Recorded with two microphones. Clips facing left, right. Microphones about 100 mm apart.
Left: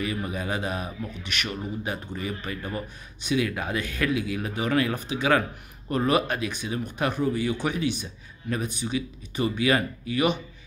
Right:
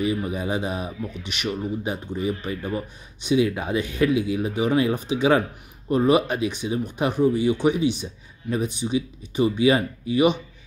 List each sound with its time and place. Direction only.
0.0 s speech: 20° right (ahead or behind)